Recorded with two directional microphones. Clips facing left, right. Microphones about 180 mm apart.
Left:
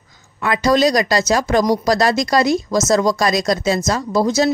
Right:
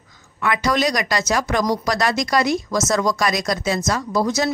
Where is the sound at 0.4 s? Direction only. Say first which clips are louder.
Left 5 dB; 35° left (ahead or behind).